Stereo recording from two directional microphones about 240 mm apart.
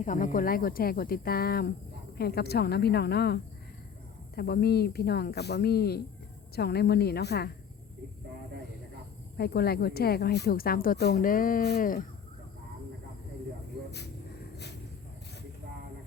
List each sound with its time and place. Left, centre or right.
0.0 s a woman's voice: left
9.4 s a woman's voice: left